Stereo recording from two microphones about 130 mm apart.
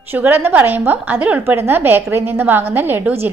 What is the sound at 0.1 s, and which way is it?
A woman's voice, 15° right (ahead or behind).